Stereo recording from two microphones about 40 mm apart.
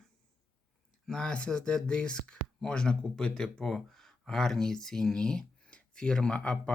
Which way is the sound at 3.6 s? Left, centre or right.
Centre.